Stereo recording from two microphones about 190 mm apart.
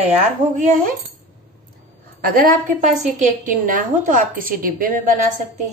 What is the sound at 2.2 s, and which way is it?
A woman's voice, 50° right (ahead or behind).